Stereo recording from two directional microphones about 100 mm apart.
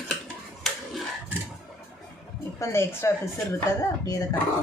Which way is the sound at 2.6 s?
25° left (ahead or behind).